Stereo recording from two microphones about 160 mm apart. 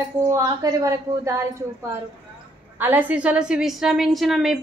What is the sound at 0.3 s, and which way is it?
A woman's voice, 25° right (ahead or behind).